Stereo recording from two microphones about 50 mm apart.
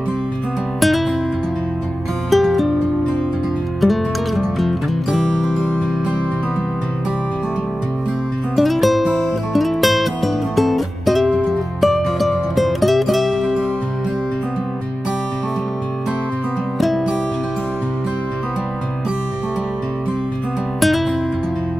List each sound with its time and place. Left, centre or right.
0.7 s music: centre
2.3 s music: centre
3.8 s music: centre
5.2 s music: centre
8.5 s music: centre
20.8 s music: centre